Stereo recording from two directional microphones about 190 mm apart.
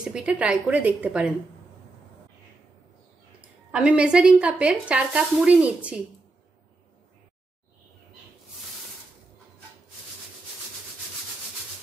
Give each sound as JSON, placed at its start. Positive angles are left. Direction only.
{"t": 0.0, "sound": "a woman's voice", "side_deg": -5}
{"t": 3.3, "sound": "speech", "side_deg": -5}